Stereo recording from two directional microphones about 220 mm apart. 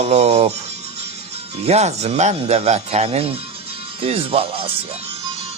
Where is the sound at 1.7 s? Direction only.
30° right (ahead or behind).